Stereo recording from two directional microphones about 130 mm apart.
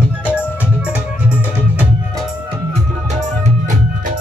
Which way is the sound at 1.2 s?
10° right (ahead or behind).